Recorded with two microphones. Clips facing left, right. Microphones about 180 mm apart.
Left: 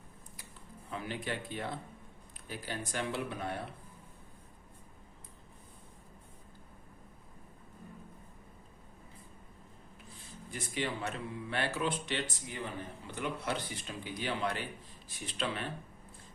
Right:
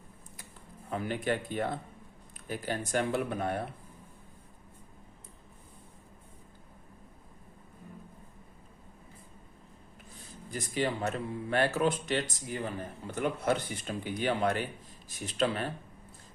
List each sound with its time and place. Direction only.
0.9 s speech: 50° right (ahead or behind)
10.5 s speech: 40° right (ahead or behind)